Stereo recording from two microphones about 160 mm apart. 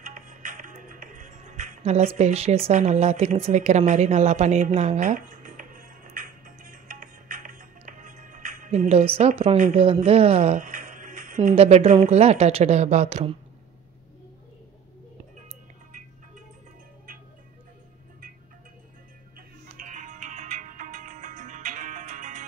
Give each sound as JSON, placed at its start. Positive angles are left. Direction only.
{"t": 0.0, "sound": "music", "side_deg": -50}
{"t": 9.5, "sound": "speech", "side_deg": -40}
{"t": 19.3, "sound": "music", "side_deg": -55}